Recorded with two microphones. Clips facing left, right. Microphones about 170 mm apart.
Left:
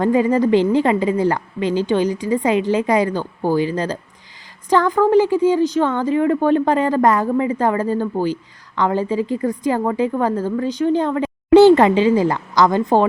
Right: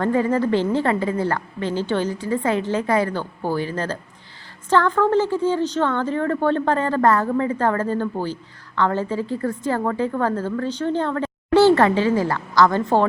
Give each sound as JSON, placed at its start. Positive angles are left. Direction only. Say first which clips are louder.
{"t": 0.0, "sound": "a woman's voice", "louder": "left 4 dB", "side_deg": 15}